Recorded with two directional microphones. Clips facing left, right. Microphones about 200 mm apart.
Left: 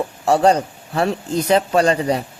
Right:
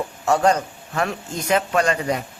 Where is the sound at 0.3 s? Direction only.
35° left (ahead or behind).